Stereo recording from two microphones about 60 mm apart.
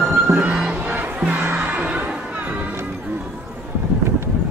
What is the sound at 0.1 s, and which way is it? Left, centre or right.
Music, right.